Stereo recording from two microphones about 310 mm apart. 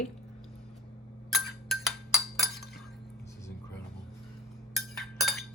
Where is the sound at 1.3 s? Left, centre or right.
Centre.